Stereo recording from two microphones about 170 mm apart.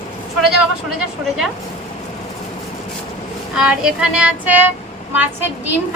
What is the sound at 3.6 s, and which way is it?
A woman's voice, 5° right (ahead or behind).